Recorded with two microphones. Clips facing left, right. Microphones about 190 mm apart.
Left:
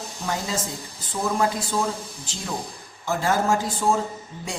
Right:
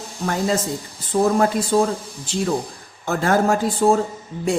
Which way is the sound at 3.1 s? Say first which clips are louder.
Right 4 dB; 60° right (ahead or behind).